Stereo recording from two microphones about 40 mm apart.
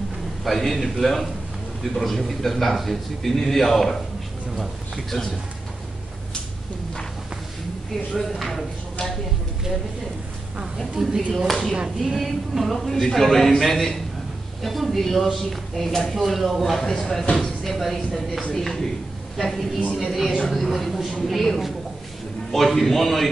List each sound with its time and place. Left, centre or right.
0.4 s a man's voice: centre
8.2 s a man's voice: centre
11.0 s speech: centre
11.3 s a man's voice: centre
16.8 s speech: centre
17.4 s a man's voice: centre